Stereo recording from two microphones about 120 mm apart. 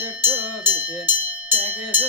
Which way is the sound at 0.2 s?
15° right (ahead or behind).